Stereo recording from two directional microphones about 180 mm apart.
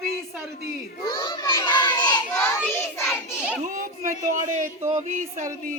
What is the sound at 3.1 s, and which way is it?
Child singing, 5° right (ahead or behind).